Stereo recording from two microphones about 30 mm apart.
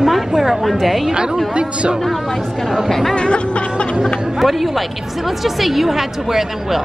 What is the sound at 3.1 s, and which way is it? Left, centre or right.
Music, left.